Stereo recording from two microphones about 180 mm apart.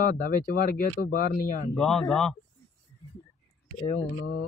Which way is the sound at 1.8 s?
Centre (ahead or behind).